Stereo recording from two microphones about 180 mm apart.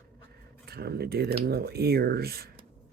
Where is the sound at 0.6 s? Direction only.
60° right (ahead or behind).